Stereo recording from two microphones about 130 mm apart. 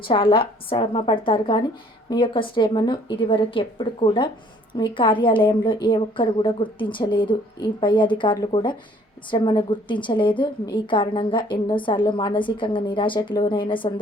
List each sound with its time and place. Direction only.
0.0 s a woman's voice: 40° left (ahead or behind)